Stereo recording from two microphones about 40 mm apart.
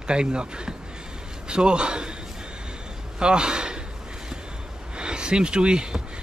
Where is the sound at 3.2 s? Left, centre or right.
Right.